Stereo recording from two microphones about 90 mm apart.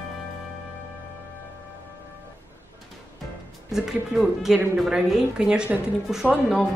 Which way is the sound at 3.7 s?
5° right (ahead or behind).